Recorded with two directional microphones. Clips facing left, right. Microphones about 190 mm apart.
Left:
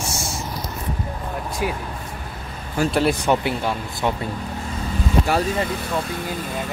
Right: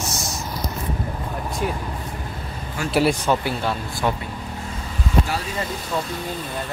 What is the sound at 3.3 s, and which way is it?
Speech, 15° left (ahead or behind).